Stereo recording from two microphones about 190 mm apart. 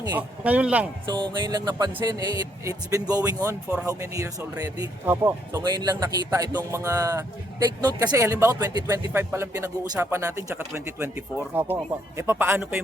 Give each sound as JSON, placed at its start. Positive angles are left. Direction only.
{"t": 0.1, "sound": "speech", "side_deg": -10}
{"t": 1.2, "sound": "speech", "side_deg": -20}